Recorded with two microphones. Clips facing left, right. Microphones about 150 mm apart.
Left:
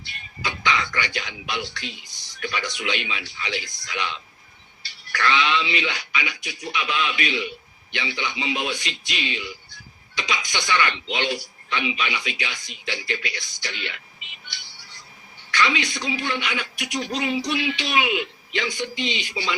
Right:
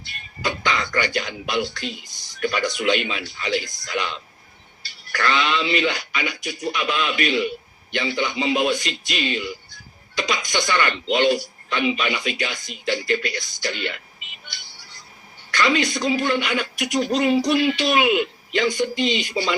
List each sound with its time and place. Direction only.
0.0 s a sound: 45° right (ahead or behind)
2.2 s speech: 45° right (ahead or behind)
14.4 s music: 45° right (ahead or behind)
15.5 s speech: 40° right (ahead or behind)